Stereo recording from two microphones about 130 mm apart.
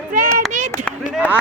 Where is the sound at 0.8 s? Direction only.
65° right (ahead or behind).